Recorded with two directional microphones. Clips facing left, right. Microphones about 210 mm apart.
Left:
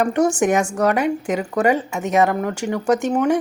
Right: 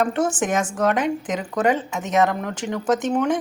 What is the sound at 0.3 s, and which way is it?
Speech, 5° right (ahead or behind).